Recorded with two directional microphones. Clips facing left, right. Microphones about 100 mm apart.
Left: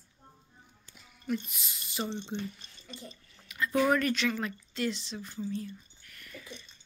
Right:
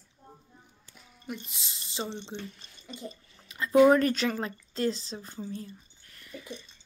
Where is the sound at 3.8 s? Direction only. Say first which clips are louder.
Right 6 dB; 30° right (ahead or behind).